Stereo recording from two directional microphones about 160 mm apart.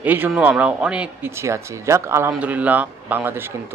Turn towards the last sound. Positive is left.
turn(degrees=-15)  # may be behind; listen again after turning